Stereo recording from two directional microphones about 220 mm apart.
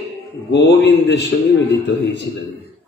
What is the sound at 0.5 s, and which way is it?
Speech, 50° left (ahead or behind).